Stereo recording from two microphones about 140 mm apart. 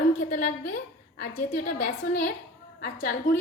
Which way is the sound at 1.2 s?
90° left.